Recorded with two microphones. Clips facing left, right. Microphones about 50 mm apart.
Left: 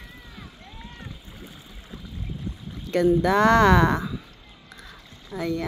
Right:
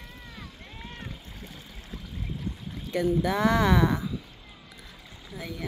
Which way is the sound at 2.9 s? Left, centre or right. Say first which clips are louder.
Left 6 dB; left.